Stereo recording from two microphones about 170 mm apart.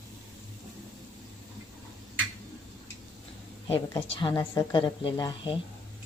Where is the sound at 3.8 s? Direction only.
25° left (ahead or behind).